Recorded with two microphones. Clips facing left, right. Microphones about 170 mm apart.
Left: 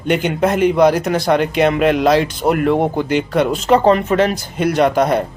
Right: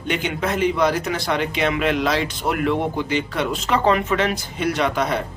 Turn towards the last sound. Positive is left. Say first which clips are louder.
# left 7 dB
turn(degrees=45)  # may be behind; listen again after turning